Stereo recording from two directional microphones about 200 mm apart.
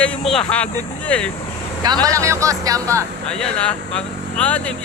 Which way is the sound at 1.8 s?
20° right (ahead or behind).